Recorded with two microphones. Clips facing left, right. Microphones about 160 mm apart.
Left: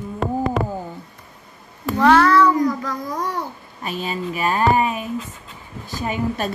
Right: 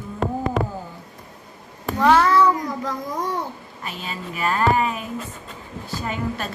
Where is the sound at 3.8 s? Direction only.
20° left (ahead or behind).